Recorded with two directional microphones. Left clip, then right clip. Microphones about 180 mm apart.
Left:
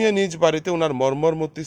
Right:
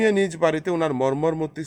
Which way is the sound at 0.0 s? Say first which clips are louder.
Left 1 dB; 25° left (ahead or behind).